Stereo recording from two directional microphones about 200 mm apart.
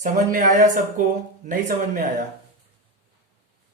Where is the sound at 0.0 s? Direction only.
40° right (ahead or behind).